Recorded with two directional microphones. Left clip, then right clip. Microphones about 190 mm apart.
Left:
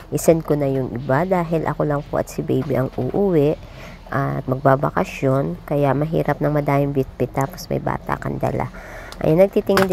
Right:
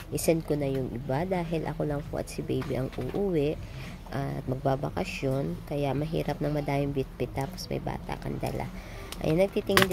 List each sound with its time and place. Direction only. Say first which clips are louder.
0.1 s speech: left 10 dB; 15° left (ahead or behind)
9.2 s speech: left 11 dB; 20° left (ahead or behind)